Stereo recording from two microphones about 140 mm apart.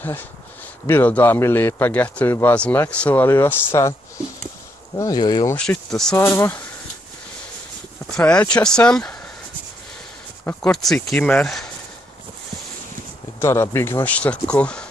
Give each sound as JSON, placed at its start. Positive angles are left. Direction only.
{"t": 0.8, "sound": "a man's voice", "side_deg": 15}
{"t": 4.9, "sound": "speech", "side_deg": 25}
{"t": 5.6, "sound": "speech", "side_deg": 5}
{"t": 6.1, "sound": "a man's voice", "side_deg": 20}
{"t": 8.2, "sound": "a man's voice", "side_deg": 10}
{"t": 10.6, "sound": "speech", "side_deg": 0}
{"t": 13.4, "sound": "a man's voice", "side_deg": 20}